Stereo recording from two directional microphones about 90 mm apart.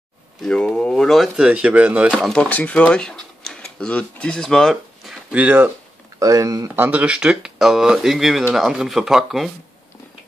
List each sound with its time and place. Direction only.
0.4 s speech: 5° left (ahead or behind)
1.3 s speech: 10° right (ahead or behind)
2.3 s speech: 15° left (ahead or behind)
5.3 s speech: 15° right (ahead or behind)
6.1 s speech: 40° right (ahead or behind)
6.7 s speech: 20° right (ahead or behind); by 9.5 s 5° right (ahead or behind)